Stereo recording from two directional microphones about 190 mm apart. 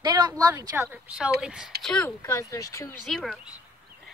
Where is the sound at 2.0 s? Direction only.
15° left (ahead or behind).